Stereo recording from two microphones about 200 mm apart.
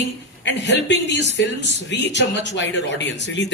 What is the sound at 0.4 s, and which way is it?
A man's voice, 60° left (ahead or behind).